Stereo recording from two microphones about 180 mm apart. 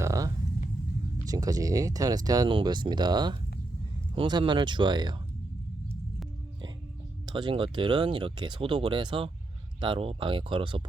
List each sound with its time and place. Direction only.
0.0 s music: 15° right (ahead or behind)
1.2 s speech: 20° right (ahead or behind)
7.3 s speech: 25° right (ahead or behind)